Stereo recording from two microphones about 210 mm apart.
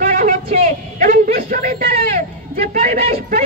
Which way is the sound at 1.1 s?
45° right (ahead or behind).